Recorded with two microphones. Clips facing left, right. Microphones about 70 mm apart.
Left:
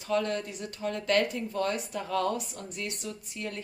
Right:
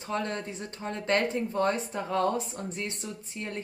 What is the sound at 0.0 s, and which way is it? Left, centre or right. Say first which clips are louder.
A woman's voice: left 3 dB; right.